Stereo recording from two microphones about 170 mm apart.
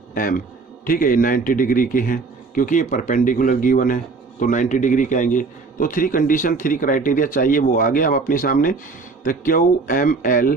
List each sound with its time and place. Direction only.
0.1 s a man's voice: 55° left (ahead or behind)